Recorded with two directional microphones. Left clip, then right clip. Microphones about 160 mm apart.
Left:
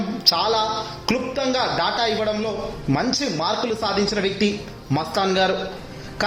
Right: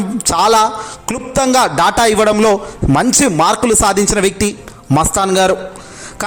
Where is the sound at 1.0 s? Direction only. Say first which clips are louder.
Right 8 dB; 60° right (ahead or behind).